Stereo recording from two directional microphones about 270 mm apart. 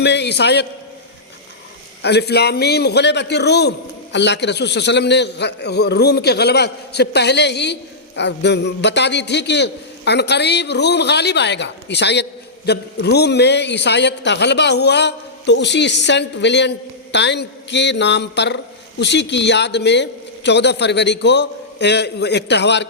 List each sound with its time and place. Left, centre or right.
0.0 s a man's voice: left
2.0 s a man's voice: left